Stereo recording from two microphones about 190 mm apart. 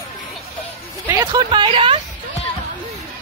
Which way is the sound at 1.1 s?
20° right (ahead or behind).